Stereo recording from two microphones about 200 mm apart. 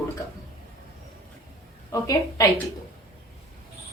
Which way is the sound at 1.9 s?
15° left (ahead or behind).